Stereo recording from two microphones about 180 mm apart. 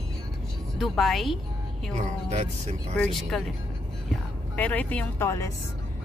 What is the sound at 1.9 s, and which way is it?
Speech, 40° right (ahead or behind).